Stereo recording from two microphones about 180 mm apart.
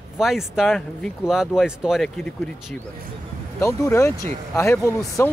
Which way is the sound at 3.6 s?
15° left (ahead or behind).